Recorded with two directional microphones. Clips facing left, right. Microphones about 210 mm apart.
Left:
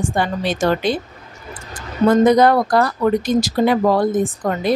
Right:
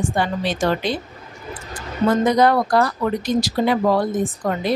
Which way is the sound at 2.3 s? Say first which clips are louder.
Left 2 dB; 45° left (ahead or behind).